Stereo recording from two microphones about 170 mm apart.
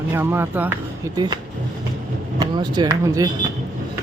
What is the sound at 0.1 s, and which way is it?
Speech, 15° right (ahead or behind).